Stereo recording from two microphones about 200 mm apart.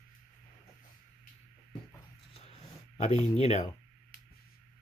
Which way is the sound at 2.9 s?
35° left (ahead or behind).